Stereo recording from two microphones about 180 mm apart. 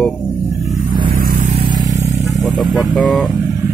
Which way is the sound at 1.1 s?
50° right (ahead or behind).